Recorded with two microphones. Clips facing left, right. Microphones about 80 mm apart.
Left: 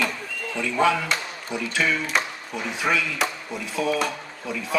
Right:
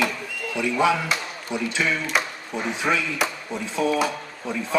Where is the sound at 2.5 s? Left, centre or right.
Right.